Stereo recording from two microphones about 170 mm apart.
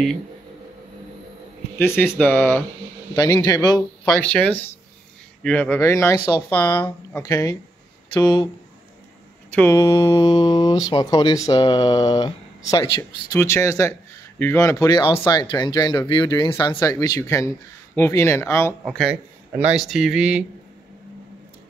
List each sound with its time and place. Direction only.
1.8 s speech: 15° left (ahead or behind)
4.0 s speech: 5° left (ahead or behind); by 8.5 s 20° left (ahead or behind)
9.5 s speech: 15° left (ahead or behind)
13.3 s speech: 15° left (ahead or behind)
18.9 s speech: 5° right (ahead or behind)